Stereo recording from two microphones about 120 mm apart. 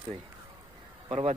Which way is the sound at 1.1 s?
65° right (ahead or behind).